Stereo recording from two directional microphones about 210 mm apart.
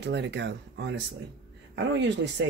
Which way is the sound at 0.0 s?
55° right (ahead or behind).